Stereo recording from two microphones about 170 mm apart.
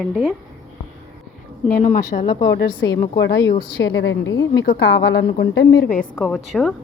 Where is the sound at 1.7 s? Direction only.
50° left (ahead or behind).